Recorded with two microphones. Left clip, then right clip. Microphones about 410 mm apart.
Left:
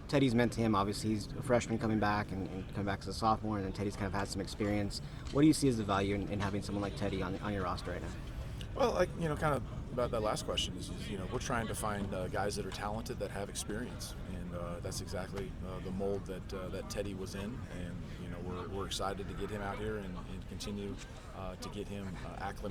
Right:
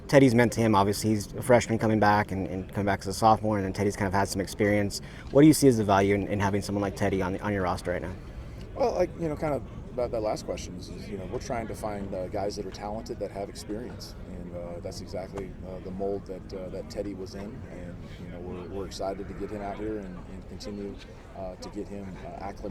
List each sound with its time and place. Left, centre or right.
0.1 s speech: centre
8.8 s speech: left
14.8 s speech: left